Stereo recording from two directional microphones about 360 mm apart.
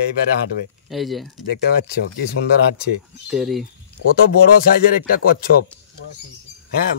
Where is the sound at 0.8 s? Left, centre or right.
Centre.